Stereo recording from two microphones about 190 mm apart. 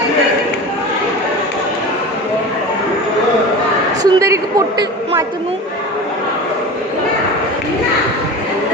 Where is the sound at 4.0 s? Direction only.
15° right (ahead or behind).